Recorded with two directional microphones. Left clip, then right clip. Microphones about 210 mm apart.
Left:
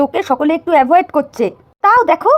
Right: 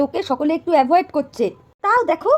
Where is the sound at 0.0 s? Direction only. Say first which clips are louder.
Left 6 dB; 15° left (ahead or behind).